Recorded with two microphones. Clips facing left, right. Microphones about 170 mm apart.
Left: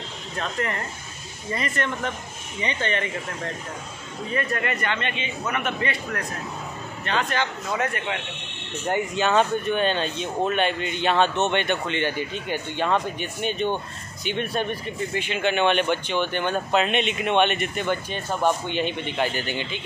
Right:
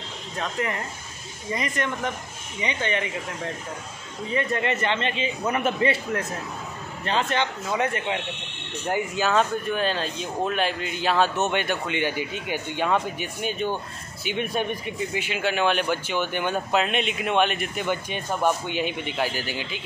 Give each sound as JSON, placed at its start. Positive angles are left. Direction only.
{"t": 0.4, "sound": "a man's voice", "side_deg": -10}
{"t": 4.3, "sound": "a man's voice", "side_deg": -20}
{"t": 8.7, "sound": "a man's voice", "side_deg": -10}